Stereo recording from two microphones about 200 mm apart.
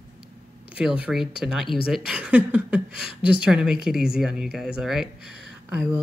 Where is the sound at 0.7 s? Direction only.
5° right (ahead or behind).